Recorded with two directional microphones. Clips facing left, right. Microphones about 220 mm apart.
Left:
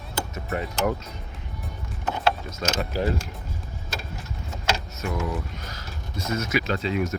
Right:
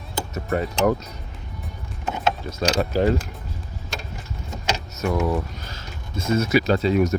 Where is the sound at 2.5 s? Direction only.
35° right (ahead or behind).